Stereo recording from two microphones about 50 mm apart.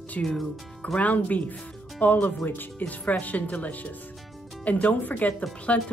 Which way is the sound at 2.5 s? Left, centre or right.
Left.